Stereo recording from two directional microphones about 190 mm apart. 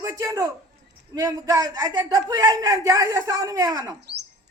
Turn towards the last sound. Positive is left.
turn(degrees=-20)  # may be behind; listen again after turning